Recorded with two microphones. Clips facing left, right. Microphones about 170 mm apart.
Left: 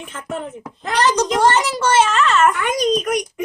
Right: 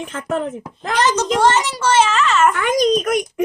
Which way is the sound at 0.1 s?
75° right (ahead or behind).